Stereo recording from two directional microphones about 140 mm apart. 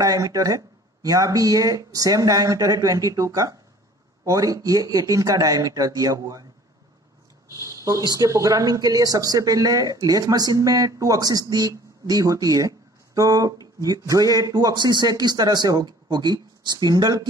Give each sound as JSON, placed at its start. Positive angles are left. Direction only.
{"t": 0.0, "sound": "speech", "side_deg": -25}
{"t": 7.5, "sound": "speech", "side_deg": -25}